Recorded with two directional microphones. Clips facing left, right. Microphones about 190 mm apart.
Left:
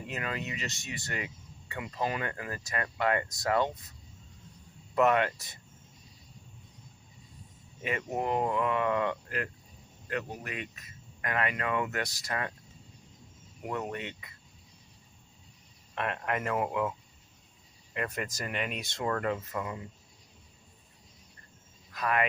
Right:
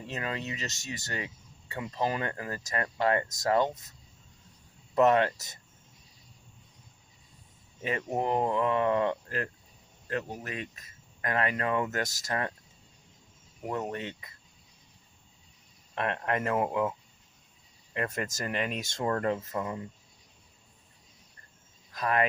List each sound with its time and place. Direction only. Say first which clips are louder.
0.1 s speech: right 1 dB; 30° right (ahead or behind)
4.9 s speech: right 2 dB; 30° right (ahead or behind)
7.8 s speech: right 2 dB; 35° right (ahead or behind)
13.7 s speech: right 2 dB; 30° right (ahead or behind)
16.0 s speech: right 2 dB; 35° right (ahead or behind)
17.9 s speech: right 2 dB; 35° right (ahead or behind)
21.9 s speech: right 2 dB; 35° right (ahead or behind)